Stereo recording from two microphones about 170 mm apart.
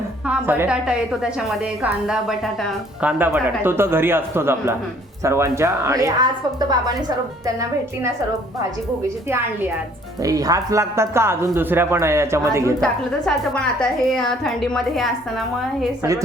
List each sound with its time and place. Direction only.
0.3 s a woman's voice: 10° right (ahead or behind)
10.2 s a woman's voice: 20° right (ahead or behind)
12.8 s a woman's voice: 5° left (ahead or behind)